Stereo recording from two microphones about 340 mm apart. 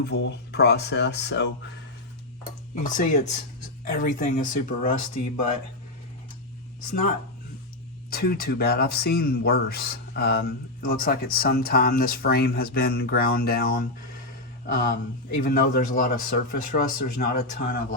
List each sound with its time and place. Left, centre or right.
0.0 s speech: left
2.8 s speech: left
8.1 s speech: left